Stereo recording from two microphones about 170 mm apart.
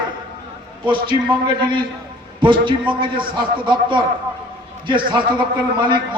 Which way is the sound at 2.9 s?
30° right (ahead or behind).